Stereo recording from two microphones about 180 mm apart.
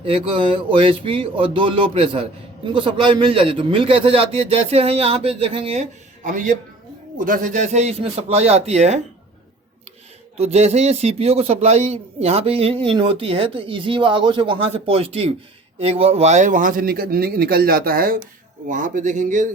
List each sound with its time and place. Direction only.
0.0 s a sound: 30° right (ahead or behind)
2.6 s a man's voice: 25° right (ahead or behind)
6.2 s a man's voice: 45° right (ahead or behind)
10.3 s a man's voice: 35° right (ahead or behind)